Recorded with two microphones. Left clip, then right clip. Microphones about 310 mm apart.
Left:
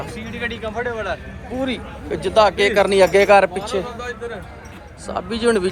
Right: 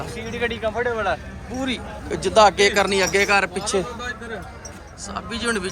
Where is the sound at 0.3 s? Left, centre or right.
Right.